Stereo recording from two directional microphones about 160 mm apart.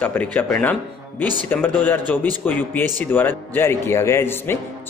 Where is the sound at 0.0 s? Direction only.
10° left (ahead or behind).